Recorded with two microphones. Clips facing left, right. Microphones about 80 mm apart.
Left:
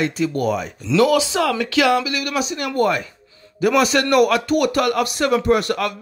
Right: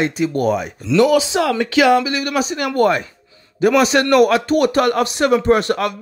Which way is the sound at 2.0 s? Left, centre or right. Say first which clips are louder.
Right 3 dB; right.